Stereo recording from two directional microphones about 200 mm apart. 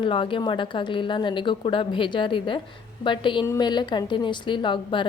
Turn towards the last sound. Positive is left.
turn(degrees=25)  # may be behind; listen again after turning